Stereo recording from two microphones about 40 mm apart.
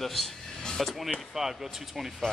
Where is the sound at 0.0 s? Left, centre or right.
Centre.